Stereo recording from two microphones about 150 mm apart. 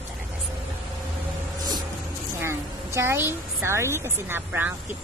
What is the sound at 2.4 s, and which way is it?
A woman's voice, 15° right (ahead or behind).